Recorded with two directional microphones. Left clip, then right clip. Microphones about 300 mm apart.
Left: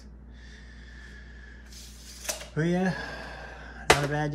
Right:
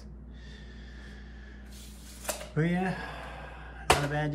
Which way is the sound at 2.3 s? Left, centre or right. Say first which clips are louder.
Left 2 dB; centre.